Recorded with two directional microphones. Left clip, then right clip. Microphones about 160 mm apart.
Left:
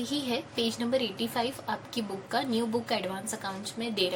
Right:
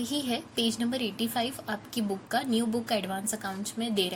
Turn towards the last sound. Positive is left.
turn(degrees=-40)  # may be behind; listen again after turning